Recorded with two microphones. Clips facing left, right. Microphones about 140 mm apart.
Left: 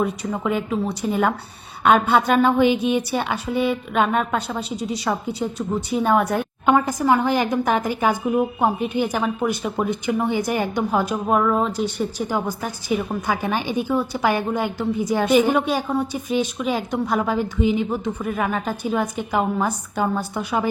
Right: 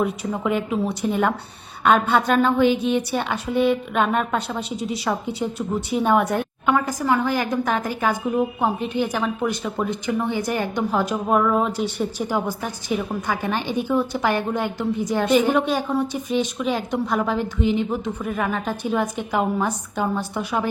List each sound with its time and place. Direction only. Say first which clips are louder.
0.0 s a woman's voice: even; centre (ahead or behind)
6.7 s a woman's voice: left 3 dB; 25° left (ahead or behind); by 20.7 s centre (ahead or behind)